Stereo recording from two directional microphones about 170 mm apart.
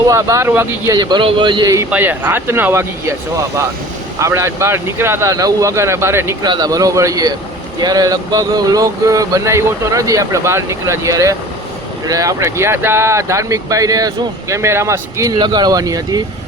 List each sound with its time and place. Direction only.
0.1 s speech: 15° right (ahead or behind)
0.9 s speech: 25° right (ahead or behind)